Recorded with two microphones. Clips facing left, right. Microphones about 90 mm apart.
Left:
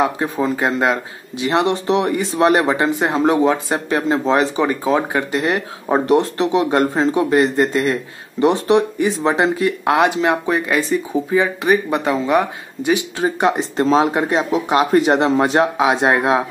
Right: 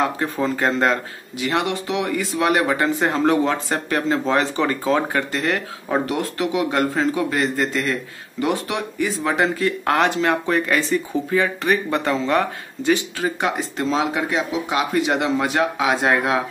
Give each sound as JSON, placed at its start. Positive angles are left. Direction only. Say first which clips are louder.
{"t": 0.0, "sound": "speech", "louder": "left 3 dB", "side_deg": 15}
{"t": 13.8, "sound": "speech", "louder": "left 6 dB", "side_deg": 40}